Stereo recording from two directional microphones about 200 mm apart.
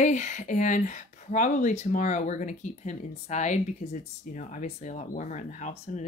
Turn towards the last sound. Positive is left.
turn(degrees=35)  # may be behind; listen again after turning